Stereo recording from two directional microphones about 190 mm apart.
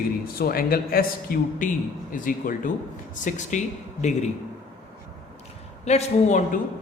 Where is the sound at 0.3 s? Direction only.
50° left (ahead or behind).